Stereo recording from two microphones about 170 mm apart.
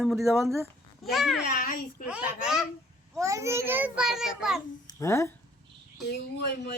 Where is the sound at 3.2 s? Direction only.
20° right (ahead or behind).